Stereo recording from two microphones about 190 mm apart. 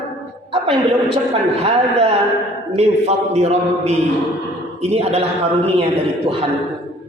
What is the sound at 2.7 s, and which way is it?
A man's voice, 35° right (ahead or behind).